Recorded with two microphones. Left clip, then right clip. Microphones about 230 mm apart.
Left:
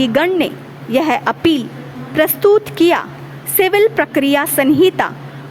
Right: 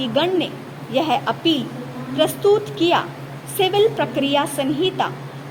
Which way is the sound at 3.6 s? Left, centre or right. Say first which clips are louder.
Left 5 dB; left.